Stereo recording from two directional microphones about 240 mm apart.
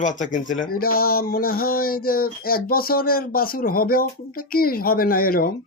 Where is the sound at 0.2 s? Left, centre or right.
Left.